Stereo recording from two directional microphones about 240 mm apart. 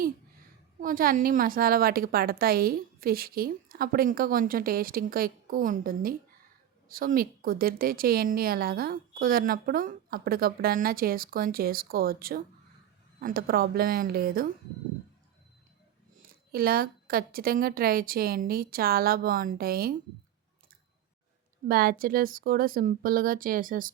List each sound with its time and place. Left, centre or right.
0.8 s a woman's voice: right
16.2 s a woman's voice: right
21.7 s a woman's voice: right